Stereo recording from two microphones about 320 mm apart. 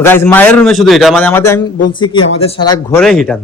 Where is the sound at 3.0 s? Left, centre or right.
Centre.